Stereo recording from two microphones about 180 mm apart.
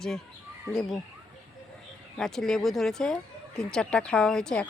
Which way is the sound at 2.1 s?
5° left (ahead or behind).